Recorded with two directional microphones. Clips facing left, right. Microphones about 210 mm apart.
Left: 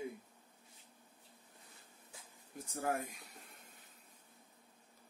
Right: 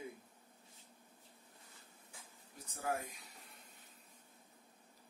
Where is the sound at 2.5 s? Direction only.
50° left (ahead or behind).